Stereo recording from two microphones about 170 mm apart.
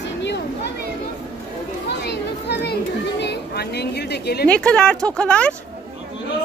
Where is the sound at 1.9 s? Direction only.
80° left.